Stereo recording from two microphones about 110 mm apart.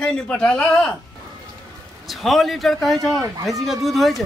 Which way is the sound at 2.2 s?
Centre (ahead or behind).